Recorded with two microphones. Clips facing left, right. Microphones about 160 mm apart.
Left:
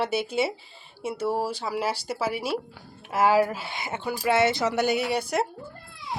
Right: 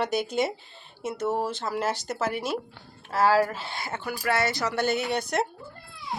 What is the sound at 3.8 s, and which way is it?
Speech, 20° left (ahead or behind).